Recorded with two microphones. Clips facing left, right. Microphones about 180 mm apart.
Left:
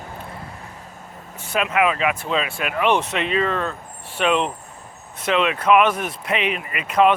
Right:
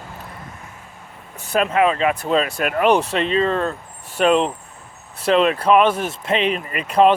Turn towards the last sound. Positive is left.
turn(degrees=-35)  # may be behind; listen again after turning